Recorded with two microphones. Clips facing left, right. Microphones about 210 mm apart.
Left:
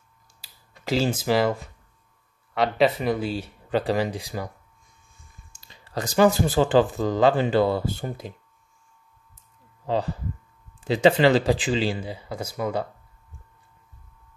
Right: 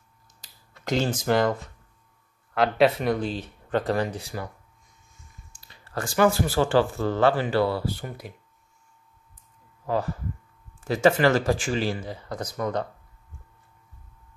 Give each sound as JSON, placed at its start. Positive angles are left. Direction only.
{"t": 0.4, "sound": "finger snapping", "side_deg": 5}
{"t": 2.5, "sound": "speech", "side_deg": 0}
{"t": 5.7, "sound": "speech", "side_deg": 20}
{"t": 9.8, "sound": "speech", "side_deg": 20}